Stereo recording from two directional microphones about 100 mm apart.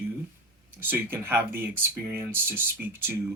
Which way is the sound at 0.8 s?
20° right (ahead or behind).